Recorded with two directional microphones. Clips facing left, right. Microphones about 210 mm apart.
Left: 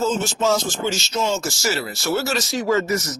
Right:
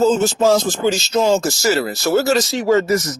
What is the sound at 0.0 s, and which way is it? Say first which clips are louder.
Speech: right 7 dB; 35° right (ahead or behind).